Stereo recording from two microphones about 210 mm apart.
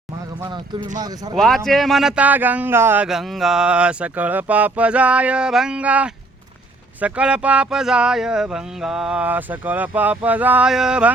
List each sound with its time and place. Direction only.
0.4 s speech: 20° right (ahead or behind)
1.4 s a man's voice: centre (ahead or behind)